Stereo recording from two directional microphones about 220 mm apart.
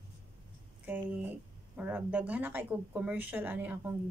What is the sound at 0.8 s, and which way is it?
Speech, 10° right (ahead or behind).